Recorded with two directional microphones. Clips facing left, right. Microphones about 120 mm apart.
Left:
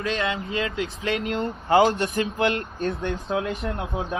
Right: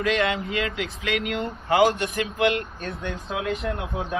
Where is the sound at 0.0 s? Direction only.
30° left (ahead or behind).